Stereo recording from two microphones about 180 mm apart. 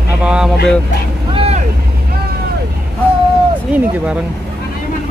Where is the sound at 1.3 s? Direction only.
35° right (ahead or behind).